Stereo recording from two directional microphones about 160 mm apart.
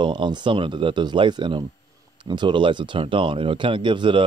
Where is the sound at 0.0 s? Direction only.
30° right (ahead or behind).